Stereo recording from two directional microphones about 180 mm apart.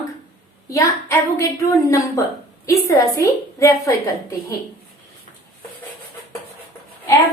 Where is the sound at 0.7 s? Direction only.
15° left (ahead or behind).